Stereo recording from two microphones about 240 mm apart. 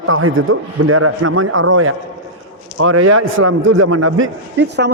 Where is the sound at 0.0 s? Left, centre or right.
Right.